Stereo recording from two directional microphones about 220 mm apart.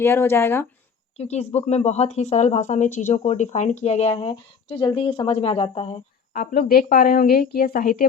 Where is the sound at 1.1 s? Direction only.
30° left (ahead or behind).